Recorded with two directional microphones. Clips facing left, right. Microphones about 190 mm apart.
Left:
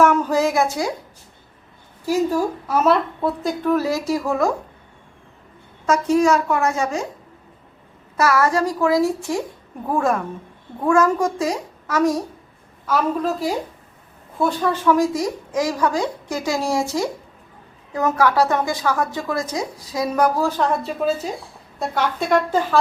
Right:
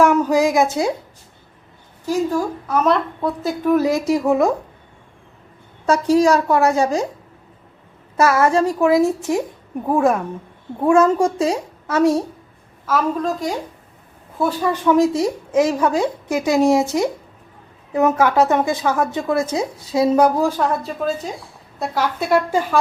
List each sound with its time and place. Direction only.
0.0 s a woman's voice: 10° right (ahead or behind)
2.0 s a woman's voice: 5° left (ahead or behind)
3.6 s a woman's voice: 15° right (ahead or behind)
5.8 s a woman's voice: 35° right (ahead or behind)
8.1 s a woman's voice: 25° right (ahead or behind)
12.8 s a woman's voice: centre (ahead or behind)
14.7 s a woman's voice: 20° right (ahead or behind)
20.5 s a woman's voice: 5° right (ahead or behind)
21.0 s a woman's voice: 5° left (ahead or behind); by 22.8 s 10° right (ahead or behind)